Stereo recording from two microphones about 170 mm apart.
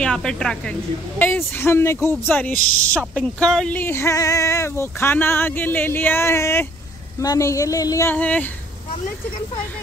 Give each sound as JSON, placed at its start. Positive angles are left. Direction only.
{"t": 0.0, "sound": "a woman's voice", "side_deg": 5}